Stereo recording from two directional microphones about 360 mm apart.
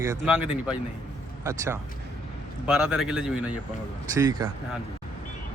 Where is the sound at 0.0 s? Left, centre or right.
Centre.